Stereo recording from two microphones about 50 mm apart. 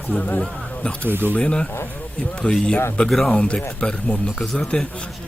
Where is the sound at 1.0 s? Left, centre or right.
Right.